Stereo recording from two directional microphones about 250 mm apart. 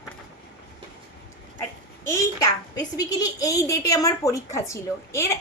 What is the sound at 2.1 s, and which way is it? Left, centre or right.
A child's voice, centre.